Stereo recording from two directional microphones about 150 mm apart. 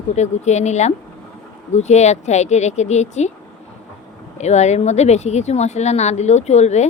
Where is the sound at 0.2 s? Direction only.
50° left (ahead or behind).